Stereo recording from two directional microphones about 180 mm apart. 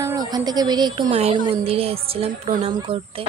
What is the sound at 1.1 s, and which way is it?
Speech, 35° right (ahead or behind).